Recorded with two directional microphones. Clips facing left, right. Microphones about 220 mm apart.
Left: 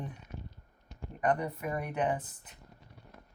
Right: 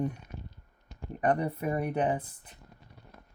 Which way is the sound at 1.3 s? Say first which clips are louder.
Right 3 dB; 30° right (ahead or behind).